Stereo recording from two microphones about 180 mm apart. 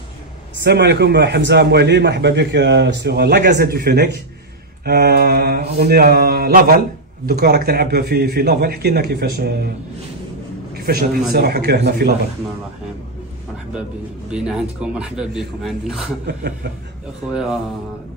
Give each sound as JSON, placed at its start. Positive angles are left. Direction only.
{"t": 0.7, "sound": "a man's voice", "side_deg": -70}
{"t": 10.7, "sound": "a man's voice", "side_deg": -60}
{"t": 14.3, "sound": "a man's voice", "side_deg": -5}
{"t": 16.3, "sound": "a man's voice", "side_deg": -65}
{"t": 17.3, "sound": "a man's voice", "side_deg": -5}